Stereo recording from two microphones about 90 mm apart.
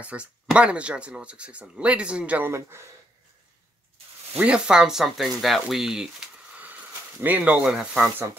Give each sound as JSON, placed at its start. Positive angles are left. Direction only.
{"t": 0.0, "sound": "speech", "side_deg": -15}
{"t": 2.4, "sound": "speech", "side_deg": -30}
{"t": 4.4, "sound": "speech", "side_deg": -10}
{"t": 6.6, "sound": "speech", "side_deg": -20}